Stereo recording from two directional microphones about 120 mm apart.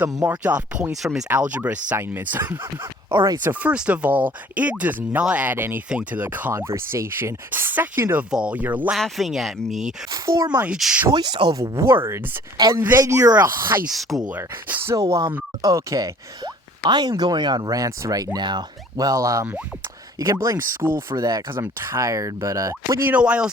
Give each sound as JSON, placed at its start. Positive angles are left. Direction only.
{"t": 0.3, "sound": "speech", "side_deg": -15}
{"t": 3.1, "sound": "speech", "side_deg": -35}
{"t": 3.4, "sound": "speech", "side_deg": -15}
{"t": 8.3, "sound": "speech", "side_deg": -10}
{"t": 9.0, "sound": "speech", "side_deg": 0}
{"t": 10.1, "sound": "speech", "side_deg": -30}
{"t": 10.8, "sound": "speech", "side_deg": -5}
{"t": 11.1, "sound": "speech", "side_deg": -35}
{"t": 12.0, "sound": "speech", "side_deg": -20}
{"t": 12.5, "sound": "speech", "side_deg": -30}
{"t": 13.9, "sound": "speech", "side_deg": 0}
{"t": 14.3, "sound": "speech", "side_deg": -15}
{"t": 23.1, "sound": "speech", "side_deg": -10}